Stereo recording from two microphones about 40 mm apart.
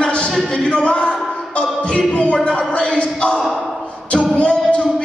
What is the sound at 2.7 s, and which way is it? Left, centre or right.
Speech, left.